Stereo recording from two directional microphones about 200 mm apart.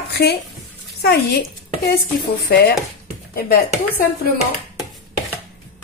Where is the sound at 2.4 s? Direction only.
50° left (ahead or behind).